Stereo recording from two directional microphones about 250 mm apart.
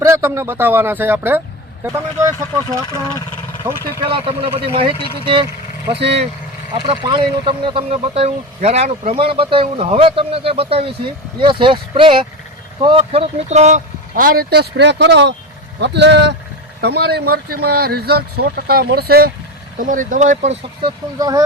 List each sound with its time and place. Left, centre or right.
0.0 s speech: centre
2.8 s speech: centre
3.6 s speech: centre
4.0 s speech: right
5.9 s speech: right
6.7 s speech: centre
21.2 s speech: centre